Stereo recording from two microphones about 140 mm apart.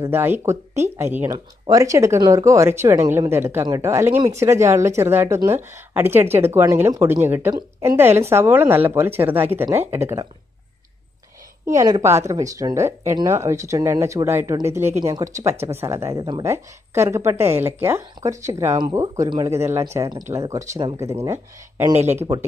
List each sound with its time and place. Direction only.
0.0 s a woman's voice: 15° right (ahead or behind)
11.6 s speech: 25° right (ahead or behind)
16.4 s a woman's voice: 20° right (ahead or behind)